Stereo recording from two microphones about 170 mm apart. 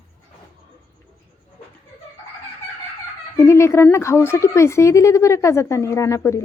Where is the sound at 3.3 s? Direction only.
15° left (ahead or behind).